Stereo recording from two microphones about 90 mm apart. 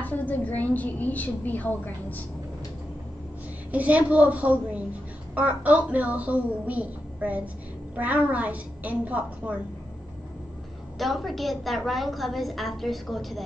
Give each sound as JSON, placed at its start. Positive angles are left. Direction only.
{"t": 0.0, "sound": "a woman's voice", "side_deg": 20}
{"t": 3.7, "sound": "a woman's voice", "side_deg": -15}
{"t": 11.0, "sound": "a woman's voice", "side_deg": 0}